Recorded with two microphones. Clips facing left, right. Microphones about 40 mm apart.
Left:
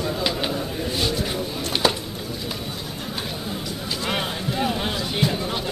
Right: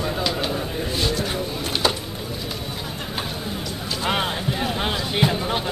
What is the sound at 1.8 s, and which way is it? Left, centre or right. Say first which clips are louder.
Bird: left 1 dB; centre.